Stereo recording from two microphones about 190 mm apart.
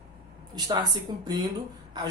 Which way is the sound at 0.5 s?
20° right (ahead or behind).